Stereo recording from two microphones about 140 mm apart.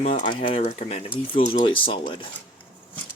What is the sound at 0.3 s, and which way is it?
Speech, 40° left (ahead or behind).